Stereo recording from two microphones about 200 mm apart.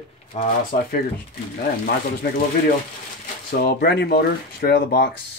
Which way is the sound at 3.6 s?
55° left (ahead or behind).